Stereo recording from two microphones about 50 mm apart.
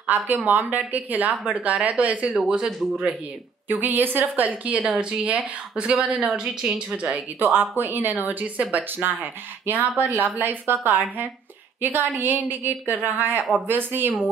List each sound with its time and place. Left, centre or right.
0.0 s speech: right
3.6 s speech: right
6.2 s a woman's voice: centre
7.3 s a woman's voice: right